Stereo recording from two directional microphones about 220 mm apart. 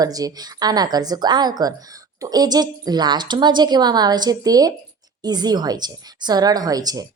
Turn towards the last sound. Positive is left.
turn(degrees=-15)  # may be behind; listen again after turning